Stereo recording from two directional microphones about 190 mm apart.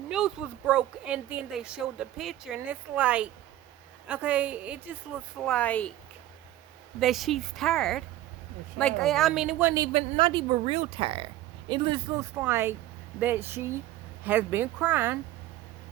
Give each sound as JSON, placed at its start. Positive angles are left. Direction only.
{"t": 0.1, "sound": "a woman's voice", "side_deg": -5}
{"t": 5.4, "sound": "speech", "side_deg": 5}
{"t": 7.0, "sound": "speech", "side_deg": 0}
{"t": 9.8, "sound": "a woman's voice", "side_deg": -30}
{"t": 12.1, "sound": "a woman's voice", "side_deg": -10}